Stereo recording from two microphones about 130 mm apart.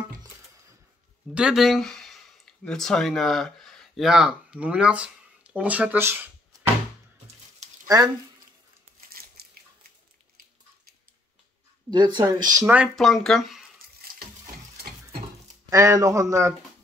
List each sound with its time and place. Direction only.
1.3 s speech: 5° right (ahead or behind)
11.9 s speech: 35° right (ahead or behind)
12.6 s speech: 10° right (ahead or behind)
12.9 s speech: centre (ahead or behind)
15.7 s speech: 25° right (ahead or behind)